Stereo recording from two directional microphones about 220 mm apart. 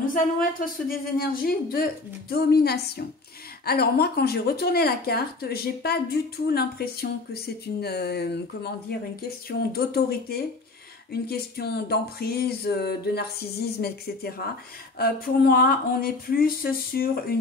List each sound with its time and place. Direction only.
0.0 s a woman's voice: 40° left (ahead or behind)